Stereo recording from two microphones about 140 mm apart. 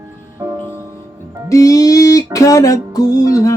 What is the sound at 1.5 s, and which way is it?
Music, 25° left (ahead or behind).